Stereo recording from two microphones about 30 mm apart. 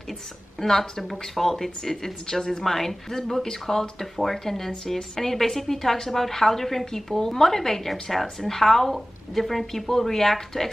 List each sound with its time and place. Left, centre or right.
0.6 s a woman's voice: centre
2.6 s a woman's voice: centre